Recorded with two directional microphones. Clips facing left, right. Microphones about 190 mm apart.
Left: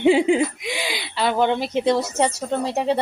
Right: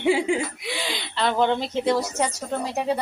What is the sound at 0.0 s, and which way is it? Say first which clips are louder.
Speech: left 5 dB; 20° left (ahead or behind).